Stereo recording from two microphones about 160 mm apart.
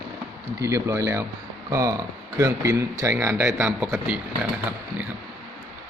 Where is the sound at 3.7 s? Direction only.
5° right (ahead or behind).